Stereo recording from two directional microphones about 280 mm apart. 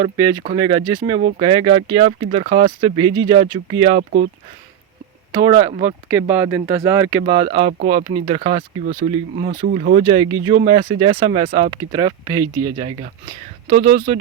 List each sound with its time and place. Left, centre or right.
0.0 s speech: centre
5.3 s speech: centre